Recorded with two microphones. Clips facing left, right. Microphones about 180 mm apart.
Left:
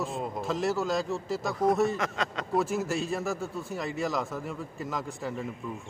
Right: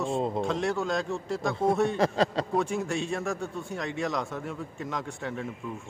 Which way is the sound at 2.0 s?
35° right (ahead or behind).